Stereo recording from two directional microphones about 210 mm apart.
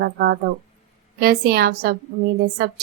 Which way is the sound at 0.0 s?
50° right (ahead or behind).